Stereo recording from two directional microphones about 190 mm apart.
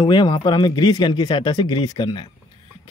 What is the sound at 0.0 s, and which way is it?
Speech, 20° left (ahead or behind).